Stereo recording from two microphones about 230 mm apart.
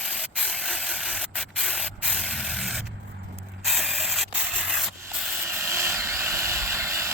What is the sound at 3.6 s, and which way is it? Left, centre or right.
Sanding, centre.